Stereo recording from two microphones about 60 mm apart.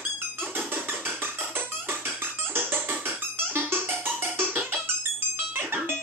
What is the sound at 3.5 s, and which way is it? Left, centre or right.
Music, right.